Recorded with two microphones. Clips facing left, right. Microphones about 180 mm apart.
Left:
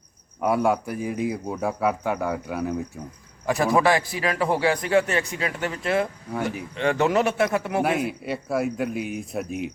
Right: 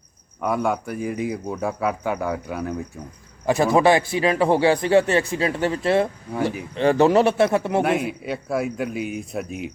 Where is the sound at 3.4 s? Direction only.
25° right (ahead or behind).